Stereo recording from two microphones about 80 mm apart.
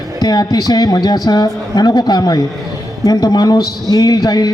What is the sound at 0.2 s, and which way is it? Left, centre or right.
A woman's voice, left.